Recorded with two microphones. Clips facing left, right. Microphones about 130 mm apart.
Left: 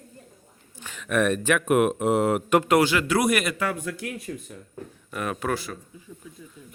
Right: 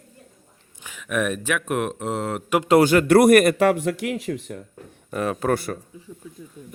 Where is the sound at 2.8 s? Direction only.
50° right (ahead or behind); by 4.6 s 70° right (ahead or behind).